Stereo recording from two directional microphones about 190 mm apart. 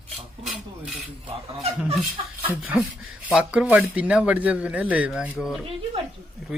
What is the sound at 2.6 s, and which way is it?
Speech, 5° right (ahead or behind).